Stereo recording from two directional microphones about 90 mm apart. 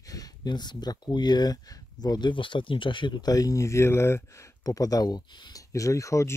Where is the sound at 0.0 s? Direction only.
40° left (ahead or behind).